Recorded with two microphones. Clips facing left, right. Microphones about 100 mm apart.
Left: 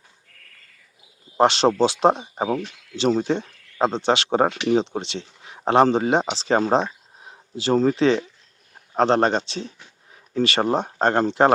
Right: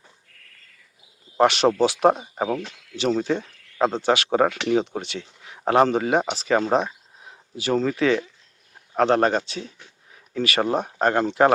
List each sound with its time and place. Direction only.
1.4 s speech: 30° left (ahead or behind)
3.8 s speech: 20° left (ahead or behind)